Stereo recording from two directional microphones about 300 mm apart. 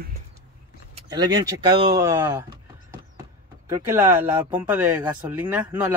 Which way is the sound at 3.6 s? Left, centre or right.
Centre.